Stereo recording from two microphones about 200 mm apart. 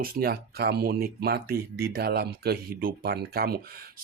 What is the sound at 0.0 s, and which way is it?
Speech, 50° right (ahead or behind).